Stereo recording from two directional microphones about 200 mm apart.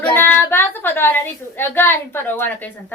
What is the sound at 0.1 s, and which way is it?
A woman's voice, 10° left (ahead or behind).